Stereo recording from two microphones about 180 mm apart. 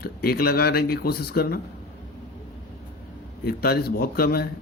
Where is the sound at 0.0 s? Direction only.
55° left (ahead or behind).